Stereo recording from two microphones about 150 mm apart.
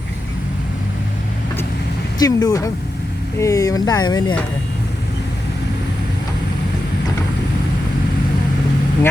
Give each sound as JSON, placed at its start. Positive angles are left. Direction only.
{"t": 2.1, "sound": "speech", "side_deg": 25}